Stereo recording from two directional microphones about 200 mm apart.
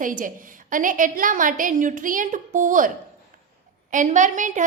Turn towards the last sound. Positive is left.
turn(degrees=-40)  # may be behind; listen again after turning